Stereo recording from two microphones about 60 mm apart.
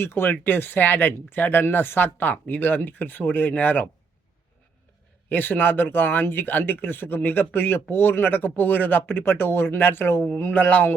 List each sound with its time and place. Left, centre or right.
0.0 s speech: left
5.3 s speech: left